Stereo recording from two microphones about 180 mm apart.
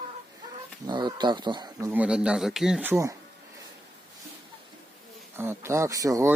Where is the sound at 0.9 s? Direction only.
25° right (ahead or behind).